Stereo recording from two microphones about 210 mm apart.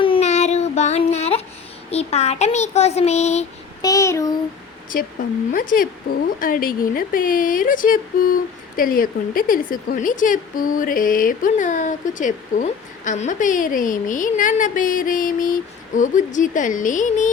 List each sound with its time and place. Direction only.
0.0 s child singing: 30° left (ahead or behind)
1.9 s speech: 30° left (ahead or behind)
3.8 s child singing: 15° left (ahead or behind)
5.5 s speech: 40° left (ahead or behind)